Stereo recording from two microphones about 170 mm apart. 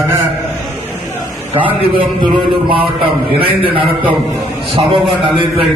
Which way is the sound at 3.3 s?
35° right (ahead or behind).